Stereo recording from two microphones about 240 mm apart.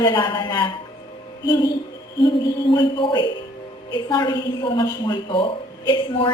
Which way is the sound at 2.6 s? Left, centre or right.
Centre.